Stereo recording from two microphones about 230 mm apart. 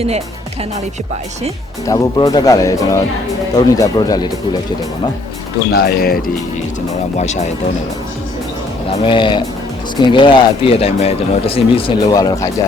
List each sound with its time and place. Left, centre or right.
1.9 s speech: centre
5.7 s speech: left
7.2 s speech: left
8.9 s speech: left